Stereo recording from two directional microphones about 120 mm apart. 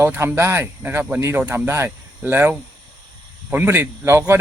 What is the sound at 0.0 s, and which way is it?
Speech, 20° right (ahead or behind).